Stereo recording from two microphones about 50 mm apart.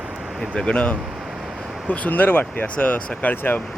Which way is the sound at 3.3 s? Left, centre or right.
Left.